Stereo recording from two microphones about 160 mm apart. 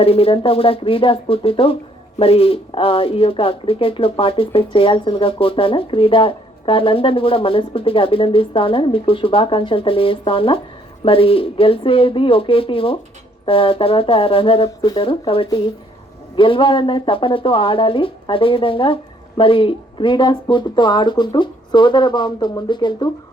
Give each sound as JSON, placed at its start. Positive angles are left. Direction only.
{"t": 0.0, "sound": "speech", "side_deg": 35}